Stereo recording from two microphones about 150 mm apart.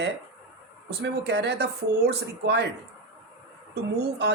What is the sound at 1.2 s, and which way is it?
Speech, 90° right.